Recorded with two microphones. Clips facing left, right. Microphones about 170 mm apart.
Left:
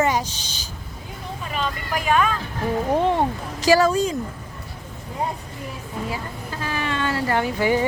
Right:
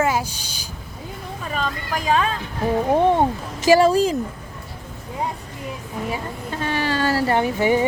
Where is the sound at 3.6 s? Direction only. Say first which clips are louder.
Right 3 dB; 25° right (ahead or behind).